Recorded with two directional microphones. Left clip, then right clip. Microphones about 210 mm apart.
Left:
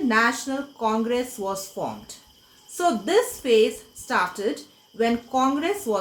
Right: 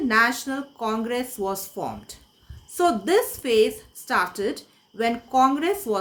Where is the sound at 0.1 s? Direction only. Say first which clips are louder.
Right 1 dB; 50° right (ahead or behind).